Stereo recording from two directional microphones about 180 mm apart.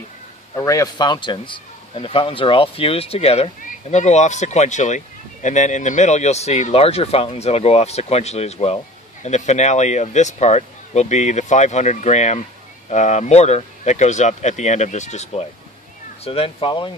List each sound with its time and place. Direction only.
0.6 s speech: 20° left (ahead or behind)